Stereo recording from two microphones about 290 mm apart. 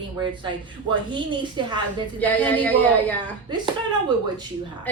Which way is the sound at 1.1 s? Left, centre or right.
Centre.